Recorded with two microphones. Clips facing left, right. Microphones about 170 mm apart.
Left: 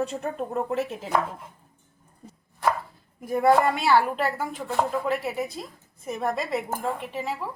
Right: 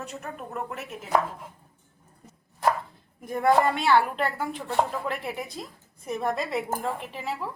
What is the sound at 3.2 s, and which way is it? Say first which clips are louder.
A woman's voice: left 2 dB; 5° left (ahead or behind).